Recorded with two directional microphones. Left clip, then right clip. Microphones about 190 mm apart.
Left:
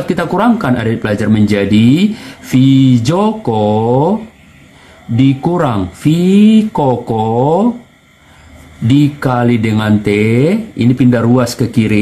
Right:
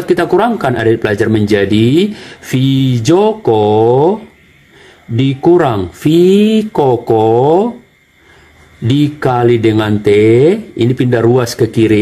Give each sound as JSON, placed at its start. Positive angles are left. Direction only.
{"t": 0.1, "sound": "speech", "side_deg": -40}
{"t": 5.1, "sound": "speech", "side_deg": -40}
{"t": 8.8, "sound": "speech", "side_deg": -40}